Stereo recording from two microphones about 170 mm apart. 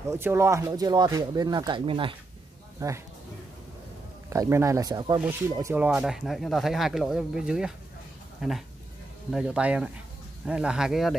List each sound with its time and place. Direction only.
0.1 s speech: 15° right (ahead or behind)
2.8 s speech: 20° right (ahead or behind)
4.3 s speech: 15° right (ahead or behind)
5.9 s speech: 5° right (ahead or behind)